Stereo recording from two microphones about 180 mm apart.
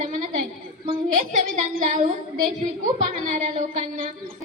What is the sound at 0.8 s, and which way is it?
Speech, 30° right (ahead or behind).